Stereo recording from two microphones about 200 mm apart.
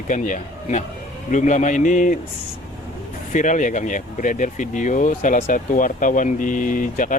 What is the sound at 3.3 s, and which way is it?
Speech, 40° left (ahead or behind).